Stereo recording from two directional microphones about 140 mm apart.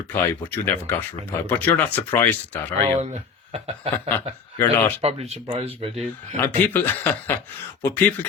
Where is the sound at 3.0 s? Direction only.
50° right (ahead or behind).